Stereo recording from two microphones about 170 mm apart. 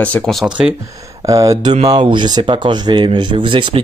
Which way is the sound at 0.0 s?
5° left (ahead or behind).